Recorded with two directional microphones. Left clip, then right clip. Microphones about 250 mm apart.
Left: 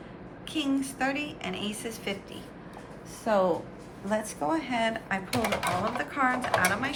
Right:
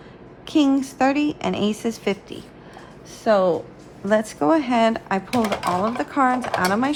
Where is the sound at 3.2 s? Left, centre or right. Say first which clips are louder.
Right 7 dB; right.